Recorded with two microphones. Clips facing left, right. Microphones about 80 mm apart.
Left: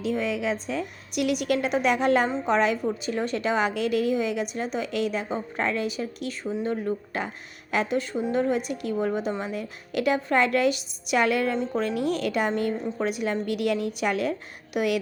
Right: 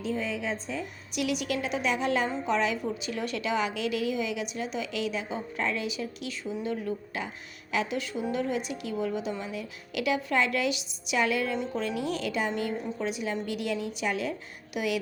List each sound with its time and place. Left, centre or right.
0.0 s a woman's voice: left
2.8 s a woman's voice: left
11.5 s a woman's voice: left
11.8 s a woman's voice: left